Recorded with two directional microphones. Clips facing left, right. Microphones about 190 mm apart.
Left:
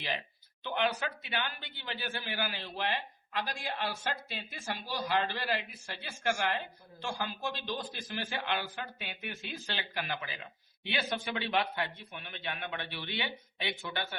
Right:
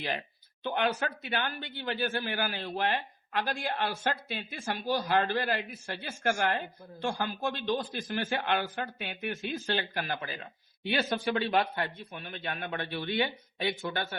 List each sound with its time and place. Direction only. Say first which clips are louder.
0.6 s speech: right 3 dB; 50° right (ahead or behind)